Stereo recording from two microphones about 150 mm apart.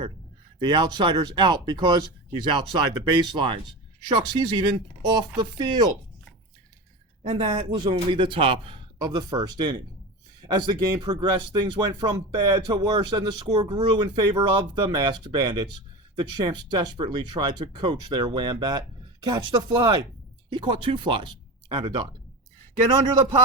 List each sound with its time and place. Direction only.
0.6 s speech: 30° right (ahead or behind)
7.3 s speech: 40° right (ahead or behind)